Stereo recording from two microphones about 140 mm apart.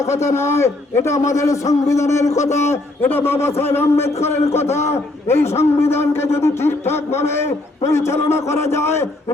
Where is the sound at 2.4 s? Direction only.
55° left (ahead or behind).